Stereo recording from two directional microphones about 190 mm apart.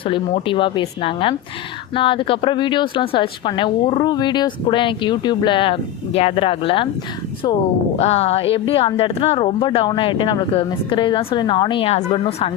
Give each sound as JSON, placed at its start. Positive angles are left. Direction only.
{"t": 0.0, "sound": "a woman's voice", "side_deg": 25}
{"t": 7.9, "sound": "a woman's voice", "side_deg": 35}